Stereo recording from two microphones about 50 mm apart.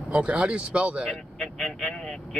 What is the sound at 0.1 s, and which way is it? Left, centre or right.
Speech, right.